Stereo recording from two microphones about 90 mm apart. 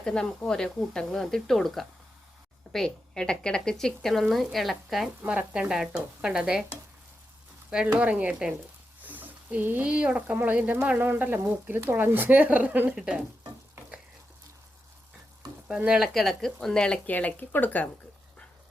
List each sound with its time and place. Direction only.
0.0 s a woman's voice: 10° left (ahead or behind)
5.2 s speech: 15° right (ahead or behind)
7.7 s speech: 10° right (ahead or behind)
15.6 s speech: 10° right (ahead or behind)
16.1 s a woman's voice: 5° left (ahead or behind); by 17.8 s 20° left (ahead or behind)